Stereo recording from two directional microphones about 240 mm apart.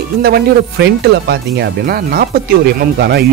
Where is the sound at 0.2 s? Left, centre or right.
Right.